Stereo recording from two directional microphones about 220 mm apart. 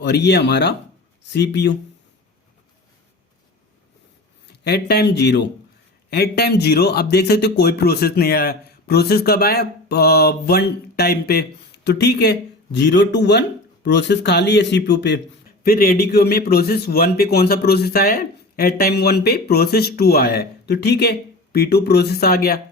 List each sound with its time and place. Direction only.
0.0 s speech: 50° left (ahead or behind)
4.4 s speech: 50° left (ahead or behind)